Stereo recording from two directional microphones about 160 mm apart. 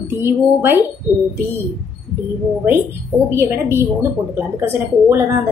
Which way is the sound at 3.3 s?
15° right (ahead or behind).